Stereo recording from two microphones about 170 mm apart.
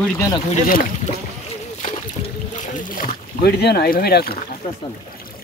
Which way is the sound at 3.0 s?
75° left (ahead or behind).